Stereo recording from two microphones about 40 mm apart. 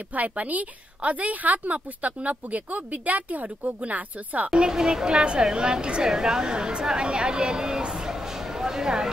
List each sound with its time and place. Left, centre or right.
0.1 s a woman's voice: right
4.5 s speech: centre